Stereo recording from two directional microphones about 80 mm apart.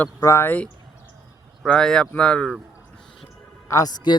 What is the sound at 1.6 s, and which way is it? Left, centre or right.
Speech, centre.